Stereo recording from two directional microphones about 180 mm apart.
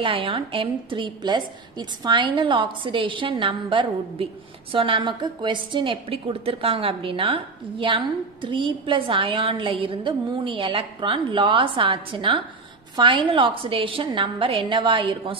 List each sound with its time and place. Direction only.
0.0 s a woman's voice: 30° right (ahead or behind)